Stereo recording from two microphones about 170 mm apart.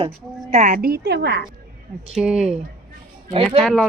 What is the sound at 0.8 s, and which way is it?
Speech, 65° right (ahead or behind).